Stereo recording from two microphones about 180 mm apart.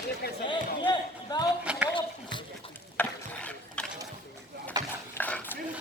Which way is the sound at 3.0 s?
5° left (ahead or behind).